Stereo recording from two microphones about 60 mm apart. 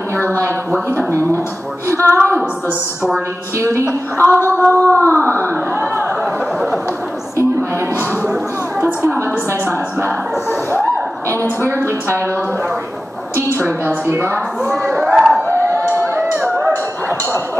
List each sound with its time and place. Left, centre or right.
0.4 s speech: right
1.9 s a woman's voice: right
3.5 s a woman's voice: right
4.2 s a woman's voice: left
9.5 s a woman's voice: right
11.7 s a woman's voice: right
13.6 s a woman's voice: right
14.9 s a sound: centre
16.5 s a sound: right